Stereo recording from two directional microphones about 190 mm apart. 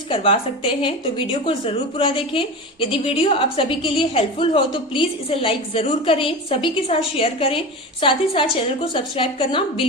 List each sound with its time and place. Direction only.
0.1 s a woman's voice: 30° left (ahead or behind)